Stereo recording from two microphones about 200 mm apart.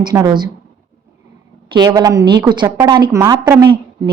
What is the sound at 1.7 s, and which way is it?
Speech, 20° right (ahead or behind).